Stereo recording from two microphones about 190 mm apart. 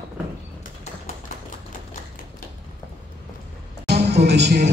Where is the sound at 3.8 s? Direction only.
60° right (ahead or behind).